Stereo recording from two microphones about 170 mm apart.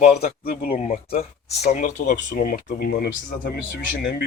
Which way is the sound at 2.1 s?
65° left (ahead or behind).